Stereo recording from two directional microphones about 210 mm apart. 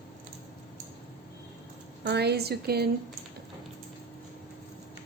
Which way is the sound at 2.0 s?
50° right (ahead or behind).